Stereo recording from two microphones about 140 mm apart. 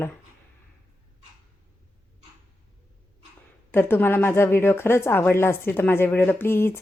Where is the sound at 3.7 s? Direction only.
15° left (ahead or behind).